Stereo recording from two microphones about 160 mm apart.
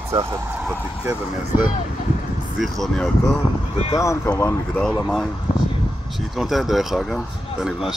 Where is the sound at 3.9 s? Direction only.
20° left (ahead or behind).